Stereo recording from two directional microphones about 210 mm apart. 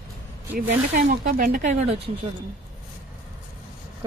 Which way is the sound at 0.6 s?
45° right (ahead or behind).